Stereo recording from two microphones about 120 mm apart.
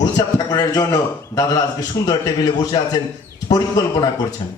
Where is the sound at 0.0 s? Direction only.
35° left (ahead or behind).